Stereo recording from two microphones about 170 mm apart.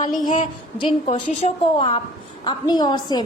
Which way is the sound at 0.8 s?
30° left (ahead or behind).